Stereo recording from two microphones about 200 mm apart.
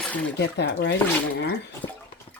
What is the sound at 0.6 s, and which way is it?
Speech, 55° left (ahead or behind).